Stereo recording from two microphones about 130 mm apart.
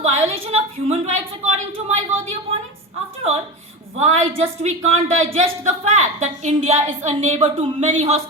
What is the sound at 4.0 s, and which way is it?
A woman's voice, 55° right (ahead or behind).